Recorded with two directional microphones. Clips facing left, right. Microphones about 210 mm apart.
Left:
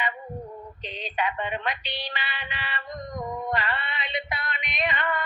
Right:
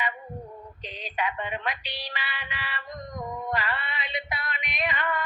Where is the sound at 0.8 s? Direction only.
25° left (ahead or behind).